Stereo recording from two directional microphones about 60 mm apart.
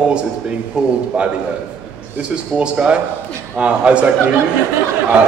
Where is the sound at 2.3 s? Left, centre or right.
Centre.